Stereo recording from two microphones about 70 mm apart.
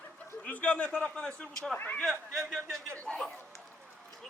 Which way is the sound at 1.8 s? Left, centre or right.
Left.